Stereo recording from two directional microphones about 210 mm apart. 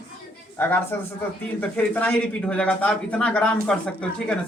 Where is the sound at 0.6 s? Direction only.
10° left (ahead or behind).